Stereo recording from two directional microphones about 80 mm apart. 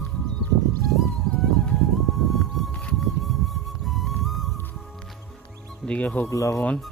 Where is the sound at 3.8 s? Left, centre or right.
Centre.